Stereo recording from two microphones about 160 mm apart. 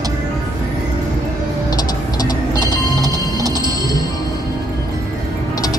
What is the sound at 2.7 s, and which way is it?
Music, 25° right (ahead or behind).